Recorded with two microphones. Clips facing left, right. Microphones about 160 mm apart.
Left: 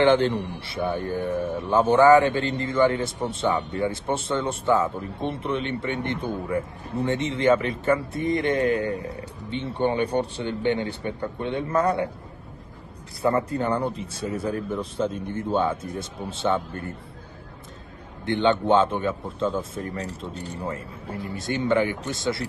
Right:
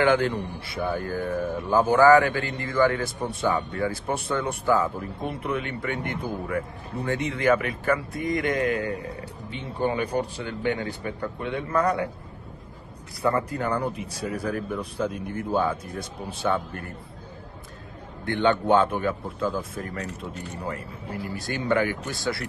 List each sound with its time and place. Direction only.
0.0 s speech: 25° left (ahead or behind)
13.2 s speech: 25° left (ahead or behind)
18.2 s speech: 20° left (ahead or behind)